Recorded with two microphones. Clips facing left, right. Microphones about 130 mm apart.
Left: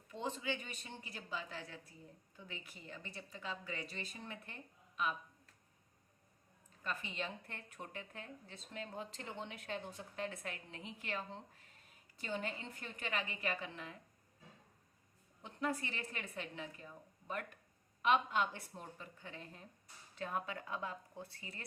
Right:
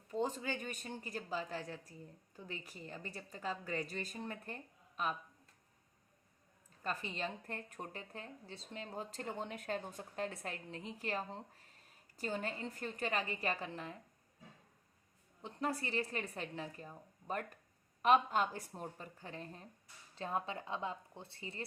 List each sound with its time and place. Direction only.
0.1 s speech: 40° right (ahead or behind)
6.8 s speech: 35° right (ahead or behind)
15.4 s speech: 35° right (ahead or behind)